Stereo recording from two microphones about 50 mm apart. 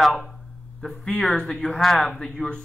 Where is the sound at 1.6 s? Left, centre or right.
Centre.